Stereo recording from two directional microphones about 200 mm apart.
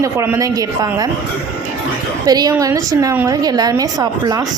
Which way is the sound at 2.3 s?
20° right (ahead or behind).